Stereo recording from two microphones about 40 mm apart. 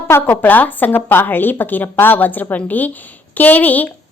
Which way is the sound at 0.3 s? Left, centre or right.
Left.